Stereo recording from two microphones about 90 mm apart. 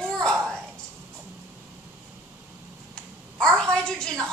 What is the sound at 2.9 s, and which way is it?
Crow, 5° left (ahead or behind).